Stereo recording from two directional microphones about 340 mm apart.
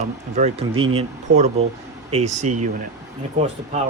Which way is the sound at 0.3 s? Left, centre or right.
Centre.